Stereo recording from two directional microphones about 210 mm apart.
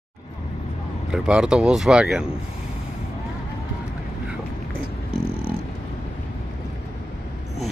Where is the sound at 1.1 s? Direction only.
5° right (ahead or behind).